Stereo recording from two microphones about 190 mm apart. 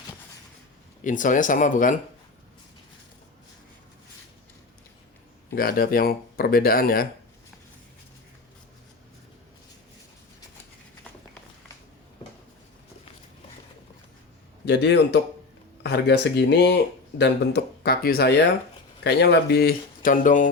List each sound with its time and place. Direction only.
1.0 s speech: 45° left (ahead or behind)
5.5 s speech: 50° left (ahead or behind)
14.6 s speech: 60° left (ahead or behind); by 20.5 s 45° left (ahead or behind)